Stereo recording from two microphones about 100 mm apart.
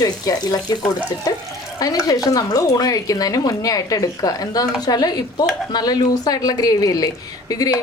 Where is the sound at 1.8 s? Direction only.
35° left (ahead or behind).